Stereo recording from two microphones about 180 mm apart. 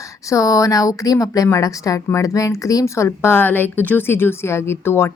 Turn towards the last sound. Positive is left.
turn(degrees=15)  # may be behind; listen again after turning